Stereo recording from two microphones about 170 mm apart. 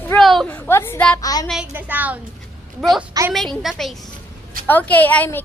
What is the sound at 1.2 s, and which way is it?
Speech, 20° left (ahead or behind).